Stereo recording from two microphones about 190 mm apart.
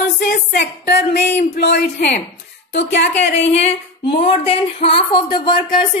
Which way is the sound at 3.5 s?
30° left (ahead or behind).